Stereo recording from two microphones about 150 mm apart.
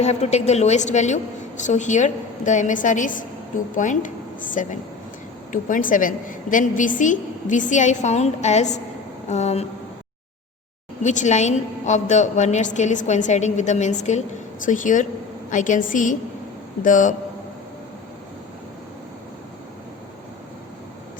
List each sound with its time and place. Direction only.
0.0 s a woman's voice: 45° left (ahead or behind)
11.0 s a woman's voice: 55° left (ahead or behind)